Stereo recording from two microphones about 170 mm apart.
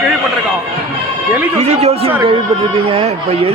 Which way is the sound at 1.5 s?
40° right (ahead or behind).